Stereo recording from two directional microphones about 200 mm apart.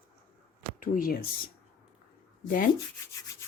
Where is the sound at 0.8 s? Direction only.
45° left (ahead or behind).